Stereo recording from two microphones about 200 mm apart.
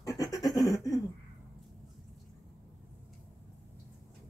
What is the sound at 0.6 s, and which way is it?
Laughter, 15° left (ahead or behind).